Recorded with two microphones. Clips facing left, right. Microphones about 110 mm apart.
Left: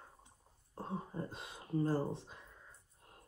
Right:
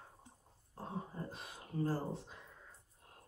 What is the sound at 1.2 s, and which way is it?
Speech, 20° left (ahead or behind).